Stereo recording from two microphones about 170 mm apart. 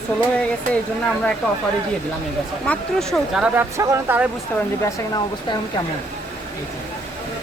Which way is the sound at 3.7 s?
15° right (ahead or behind).